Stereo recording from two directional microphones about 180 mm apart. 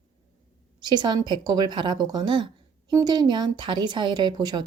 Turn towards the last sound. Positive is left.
turn(degrees=-20)  # may be behind; listen again after turning